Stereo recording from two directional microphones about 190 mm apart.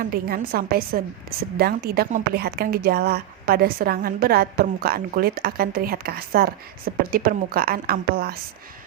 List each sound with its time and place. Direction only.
0.0 s a woman's voice: 50° right (ahead or behind)